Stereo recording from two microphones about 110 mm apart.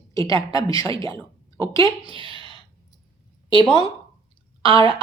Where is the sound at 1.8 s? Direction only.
50° right (ahead or behind).